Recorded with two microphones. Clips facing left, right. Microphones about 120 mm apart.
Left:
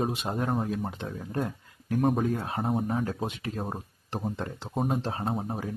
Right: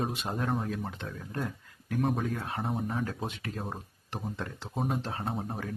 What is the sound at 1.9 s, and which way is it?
Speech, 40° left (ahead or behind).